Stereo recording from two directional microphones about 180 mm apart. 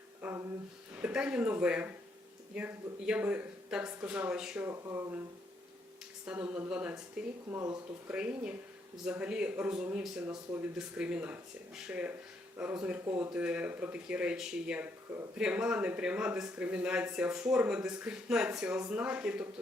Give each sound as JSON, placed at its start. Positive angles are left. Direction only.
{"t": 0.2, "sound": "a sound", "side_deg": -10}
{"t": 0.9, "sound": "speech", "side_deg": -5}
{"t": 4.7, "sound": "speech", "side_deg": -15}
{"t": 6.2, "sound": "speech", "side_deg": -10}
{"t": 7.5, "sound": "speech", "side_deg": -20}
{"t": 8.0, "sound": "speech", "side_deg": -5}